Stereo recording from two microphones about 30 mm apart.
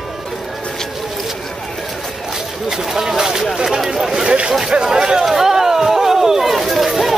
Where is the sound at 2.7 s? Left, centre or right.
Centre.